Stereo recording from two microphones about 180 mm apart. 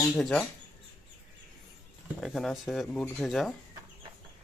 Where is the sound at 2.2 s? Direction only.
Centre (ahead or behind).